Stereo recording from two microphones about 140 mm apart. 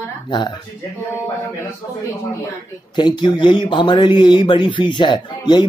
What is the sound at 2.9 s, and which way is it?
Speech, 35° left (ahead or behind).